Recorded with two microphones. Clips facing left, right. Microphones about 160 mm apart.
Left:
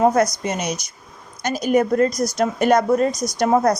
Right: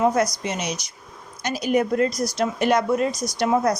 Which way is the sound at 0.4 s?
45° left (ahead or behind).